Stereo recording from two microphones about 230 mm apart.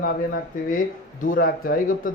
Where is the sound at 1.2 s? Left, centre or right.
Left.